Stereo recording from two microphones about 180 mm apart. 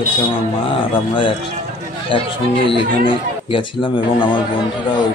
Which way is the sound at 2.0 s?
30° left (ahead or behind).